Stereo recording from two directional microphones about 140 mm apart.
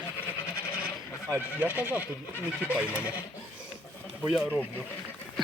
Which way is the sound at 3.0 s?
15° left (ahead or behind).